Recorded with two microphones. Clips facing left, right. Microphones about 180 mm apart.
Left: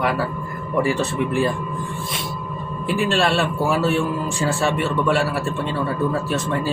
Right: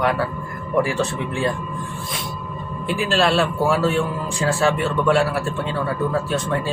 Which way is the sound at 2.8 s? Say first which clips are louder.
Even; centre (ahead or behind).